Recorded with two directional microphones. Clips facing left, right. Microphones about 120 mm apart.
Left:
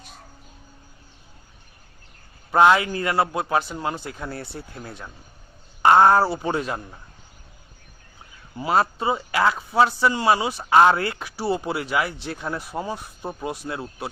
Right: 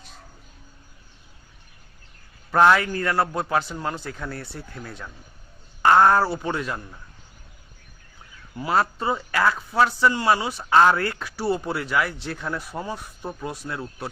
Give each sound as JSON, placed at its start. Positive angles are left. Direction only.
{"t": 2.5, "sound": "speech", "side_deg": 15}
{"t": 8.5, "sound": "speech", "side_deg": 15}